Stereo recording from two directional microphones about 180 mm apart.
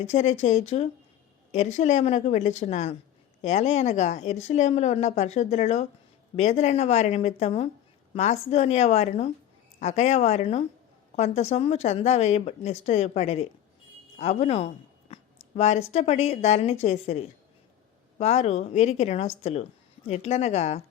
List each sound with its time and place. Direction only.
0.0 s a woman's voice: 40° left (ahead or behind)